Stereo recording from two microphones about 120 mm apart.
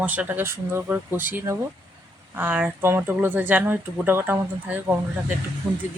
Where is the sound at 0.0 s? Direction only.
10° right (ahead or behind).